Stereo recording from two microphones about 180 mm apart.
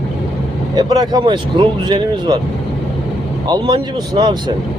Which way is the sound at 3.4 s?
25° right (ahead or behind).